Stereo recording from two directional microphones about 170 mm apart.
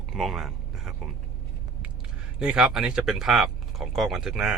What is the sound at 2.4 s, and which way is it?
Speech, 5° right (ahead or behind).